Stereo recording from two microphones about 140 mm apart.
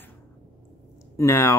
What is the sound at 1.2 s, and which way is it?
Speech, 20° left (ahead or behind).